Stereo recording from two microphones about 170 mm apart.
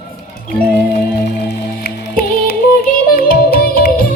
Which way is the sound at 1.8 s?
60° left (ahead or behind).